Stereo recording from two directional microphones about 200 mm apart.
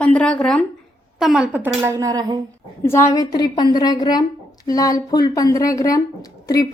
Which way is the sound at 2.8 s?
10° left (ahead or behind).